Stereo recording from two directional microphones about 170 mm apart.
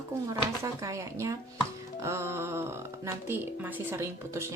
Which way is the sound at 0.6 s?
20° right (ahead or behind).